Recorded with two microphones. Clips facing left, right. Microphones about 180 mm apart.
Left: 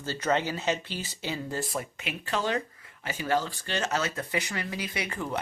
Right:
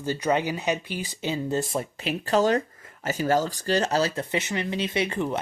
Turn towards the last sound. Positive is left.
turn(degrees=-25)  # may be behind; listen again after turning